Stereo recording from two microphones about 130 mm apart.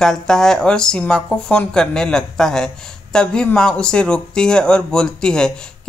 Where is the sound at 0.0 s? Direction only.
5° left (ahead or behind).